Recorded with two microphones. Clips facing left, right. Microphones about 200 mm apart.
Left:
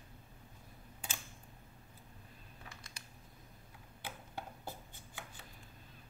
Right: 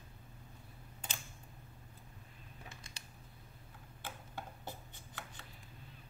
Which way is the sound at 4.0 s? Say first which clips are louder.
Left 1 dB; 15° left (ahead or behind).